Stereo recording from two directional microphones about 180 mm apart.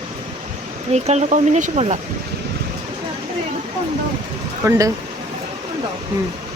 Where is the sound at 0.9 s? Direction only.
40° right (ahead or behind).